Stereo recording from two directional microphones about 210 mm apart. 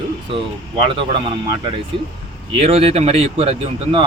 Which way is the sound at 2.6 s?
30° right (ahead or behind).